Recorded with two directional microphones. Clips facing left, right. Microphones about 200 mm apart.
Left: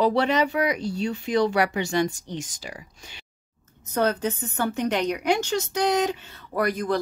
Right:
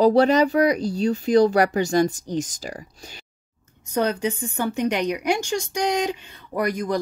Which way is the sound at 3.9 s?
10° right (ahead or behind).